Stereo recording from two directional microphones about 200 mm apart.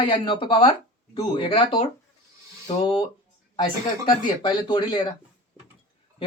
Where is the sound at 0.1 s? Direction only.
25° left (ahead or behind).